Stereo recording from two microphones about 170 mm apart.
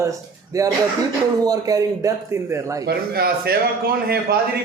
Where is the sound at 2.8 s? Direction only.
70° right (ahead or behind).